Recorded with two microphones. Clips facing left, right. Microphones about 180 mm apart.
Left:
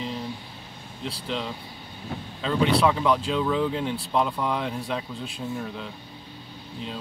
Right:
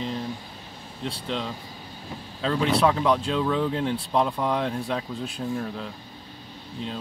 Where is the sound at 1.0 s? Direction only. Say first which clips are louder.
Right 1 dB; centre (ahead or behind).